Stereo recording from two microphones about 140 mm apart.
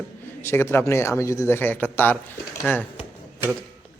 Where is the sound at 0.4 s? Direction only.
15° left (ahead or behind).